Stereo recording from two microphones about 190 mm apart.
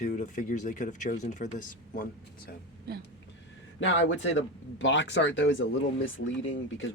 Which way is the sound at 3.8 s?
80° left.